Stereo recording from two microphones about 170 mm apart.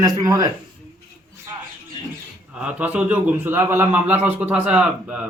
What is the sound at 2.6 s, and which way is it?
A man's voice, 5° right (ahead or behind).